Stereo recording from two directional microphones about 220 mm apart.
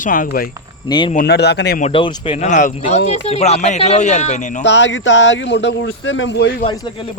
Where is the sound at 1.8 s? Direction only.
25° left (ahead or behind).